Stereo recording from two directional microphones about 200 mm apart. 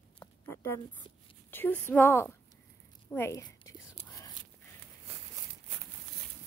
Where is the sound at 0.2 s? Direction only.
15° left (ahead or behind).